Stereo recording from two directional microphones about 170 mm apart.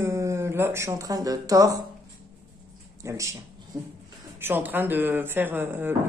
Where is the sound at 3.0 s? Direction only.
15° right (ahead or behind).